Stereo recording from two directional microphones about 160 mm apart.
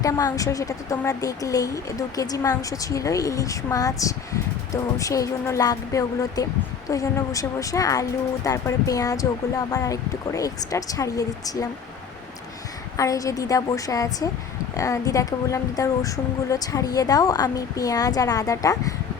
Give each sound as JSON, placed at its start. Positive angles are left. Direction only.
{"t": 0.0, "sound": "speech", "side_deg": 20}
{"t": 13.0, "sound": "speech", "side_deg": 20}